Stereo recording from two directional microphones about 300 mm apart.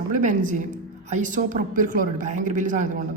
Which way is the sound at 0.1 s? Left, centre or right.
Right.